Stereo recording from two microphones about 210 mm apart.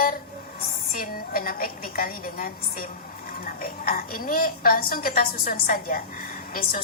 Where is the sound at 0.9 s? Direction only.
45° left (ahead or behind).